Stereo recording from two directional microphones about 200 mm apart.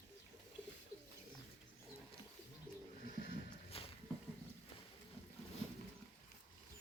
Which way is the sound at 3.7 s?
30° left (ahead or behind).